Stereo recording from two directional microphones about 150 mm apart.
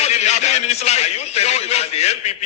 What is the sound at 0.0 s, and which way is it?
A man's voice, 45° left (ahead or behind).